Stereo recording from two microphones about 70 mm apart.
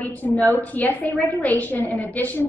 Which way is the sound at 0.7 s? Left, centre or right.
Left.